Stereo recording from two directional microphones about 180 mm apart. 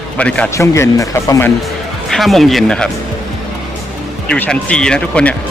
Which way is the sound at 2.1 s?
Centre (ahead or behind).